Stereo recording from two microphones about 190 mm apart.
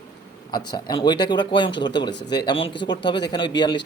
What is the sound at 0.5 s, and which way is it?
Speech, 20° left (ahead or behind).